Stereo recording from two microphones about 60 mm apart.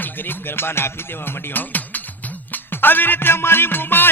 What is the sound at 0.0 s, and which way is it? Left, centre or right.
Music, left.